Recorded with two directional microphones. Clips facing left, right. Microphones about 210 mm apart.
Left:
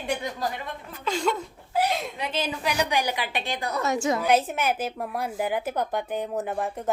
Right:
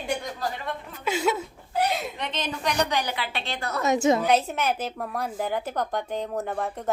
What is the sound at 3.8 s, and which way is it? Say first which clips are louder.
Speech: right 5 dB; 20° right (ahead or behind).